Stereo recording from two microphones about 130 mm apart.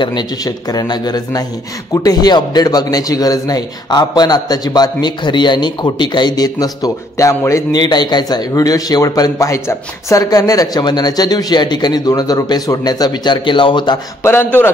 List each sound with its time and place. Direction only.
0.0 s a man's voice: 35° left (ahead or behind)
14.2 s a man's voice: 15° left (ahead or behind)